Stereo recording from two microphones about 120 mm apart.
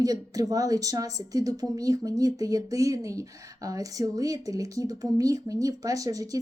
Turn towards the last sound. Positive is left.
turn(degrees=-30)  # may be behind; listen again after turning